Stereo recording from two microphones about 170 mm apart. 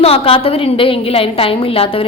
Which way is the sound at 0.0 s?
35° left (ahead or behind).